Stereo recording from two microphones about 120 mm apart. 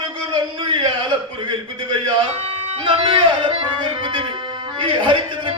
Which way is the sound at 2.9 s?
45° right (ahead or behind).